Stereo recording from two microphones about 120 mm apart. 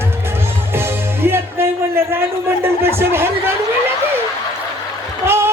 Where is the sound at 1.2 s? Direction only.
20° right (ahead or behind).